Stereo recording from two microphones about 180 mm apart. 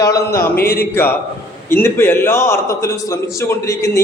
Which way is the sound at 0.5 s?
55° left (ahead or behind).